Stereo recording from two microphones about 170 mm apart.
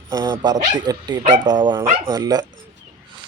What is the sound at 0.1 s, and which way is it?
Speech, 25° right (ahead or behind).